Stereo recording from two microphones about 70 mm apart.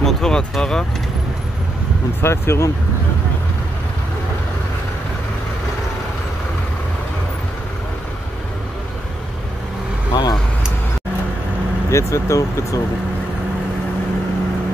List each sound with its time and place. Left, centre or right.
0.0 s speech: centre
2.2 s speech: left
10.1 s vehicle: left
11.9 s speech: left